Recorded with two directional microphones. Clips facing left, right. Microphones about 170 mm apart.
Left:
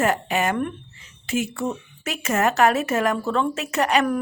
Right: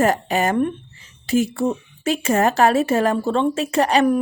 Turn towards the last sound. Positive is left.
turn(degrees=-30)  # may be behind; listen again after turning